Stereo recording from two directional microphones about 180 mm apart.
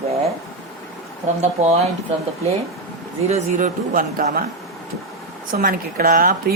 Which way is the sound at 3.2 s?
40° right (ahead or behind).